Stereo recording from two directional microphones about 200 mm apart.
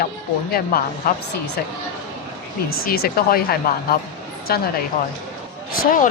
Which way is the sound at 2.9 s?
50° left (ahead or behind).